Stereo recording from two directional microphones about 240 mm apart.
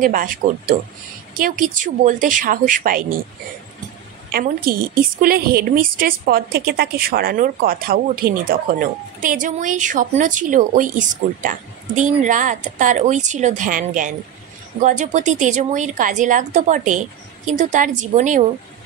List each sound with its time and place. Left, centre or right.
0.0 s a woman's voice: right
4.3 s a woman's voice: right